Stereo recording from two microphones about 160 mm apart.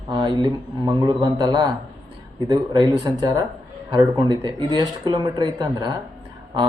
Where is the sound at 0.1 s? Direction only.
25° right (ahead or behind).